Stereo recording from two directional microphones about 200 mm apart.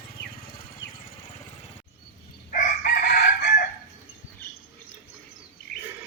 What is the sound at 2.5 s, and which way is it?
Chicken, 45° left (ahead or behind).